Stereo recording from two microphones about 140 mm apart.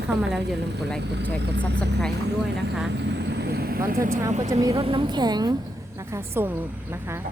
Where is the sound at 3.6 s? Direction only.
90° right.